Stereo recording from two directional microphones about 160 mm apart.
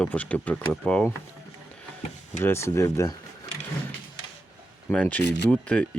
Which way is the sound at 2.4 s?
15° left (ahead or behind).